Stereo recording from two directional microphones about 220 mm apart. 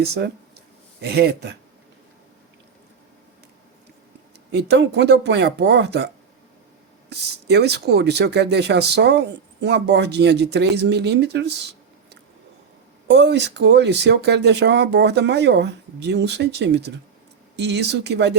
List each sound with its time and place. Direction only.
0.0 s speech: 45° right (ahead or behind)
4.5 s speech: 50° right (ahead or behind)
7.1 s speech: 50° right (ahead or behind)
13.1 s speech: 50° right (ahead or behind)